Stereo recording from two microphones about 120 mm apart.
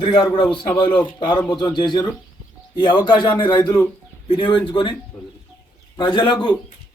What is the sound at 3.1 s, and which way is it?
A man's voice, 40° left (ahead or behind).